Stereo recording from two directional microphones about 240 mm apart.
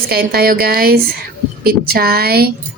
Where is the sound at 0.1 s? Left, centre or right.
Right.